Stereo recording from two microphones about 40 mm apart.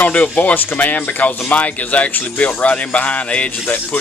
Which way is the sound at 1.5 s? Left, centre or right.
Left.